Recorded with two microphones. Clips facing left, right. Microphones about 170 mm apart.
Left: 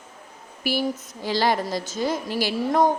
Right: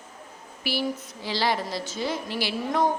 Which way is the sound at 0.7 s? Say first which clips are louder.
Left 3 dB; 45° left (ahead or behind).